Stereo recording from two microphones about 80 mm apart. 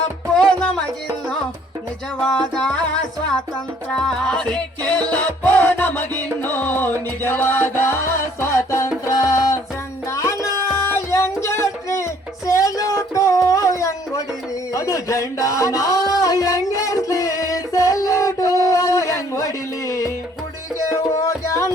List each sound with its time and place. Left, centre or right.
0.3 s music: centre
2.2 s music: centre
5.0 s music: centre; by 12.0 s left
12.5 s a sound: left
20.7 s music: left